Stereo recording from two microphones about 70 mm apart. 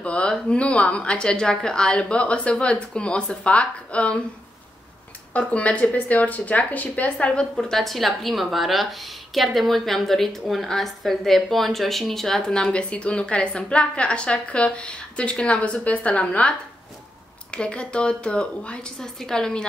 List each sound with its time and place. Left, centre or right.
0.0 s speech: centre
5.5 s a woman's voice: centre
7.5 s a woman's voice: centre